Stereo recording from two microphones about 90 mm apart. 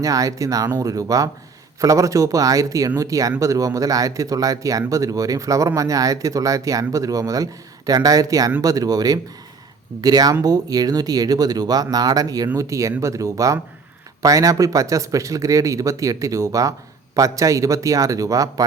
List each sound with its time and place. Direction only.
0.0 s speech: 40° right (ahead or behind)